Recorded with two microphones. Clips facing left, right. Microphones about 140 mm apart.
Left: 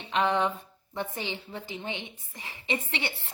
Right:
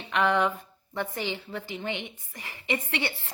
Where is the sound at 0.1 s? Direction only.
20° left (ahead or behind).